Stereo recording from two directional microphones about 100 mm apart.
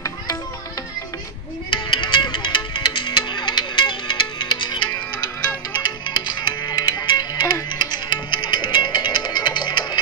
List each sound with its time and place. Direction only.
1.7 s music: 55° left (ahead or behind)
6.0 s music: 45° left (ahead or behind)